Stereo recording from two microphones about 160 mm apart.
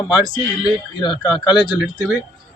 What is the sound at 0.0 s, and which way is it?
Speech, 25° left (ahead or behind).